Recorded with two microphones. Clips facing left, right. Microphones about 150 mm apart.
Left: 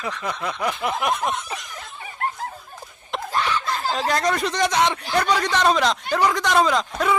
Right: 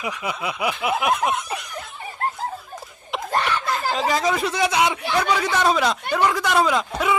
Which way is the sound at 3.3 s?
60° right (ahead or behind).